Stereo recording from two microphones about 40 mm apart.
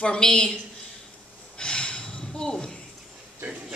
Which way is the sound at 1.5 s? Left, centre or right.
Left.